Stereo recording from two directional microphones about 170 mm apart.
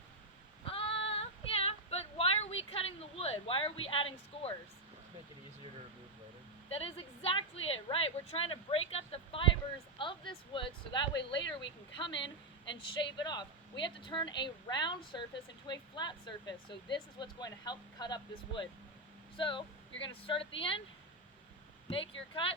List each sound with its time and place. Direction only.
0.6 s female singing: 35° left (ahead or behind)
6.7 s a woman's voice: 35° left (ahead or behind)
12.1 s a woman's voice: 90° left
12.7 s a woman's voice: 25° left (ahead or behind)